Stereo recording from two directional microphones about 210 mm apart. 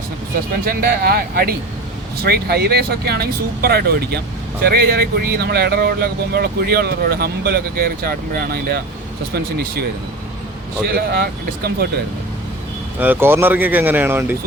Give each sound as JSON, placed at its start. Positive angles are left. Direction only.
{"t": 0.6, "sound": "speech", "side_deg": -45}
{"t": 10.8, "sound": "speech", "side_deg": -50}
{"t": 13.0, "sound": "speech", "side_deg": -10}